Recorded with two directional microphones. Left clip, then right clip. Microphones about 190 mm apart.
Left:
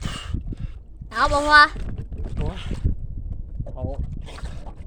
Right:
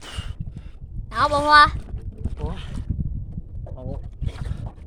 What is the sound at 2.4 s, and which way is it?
Boat, 15° left (ahead or behind).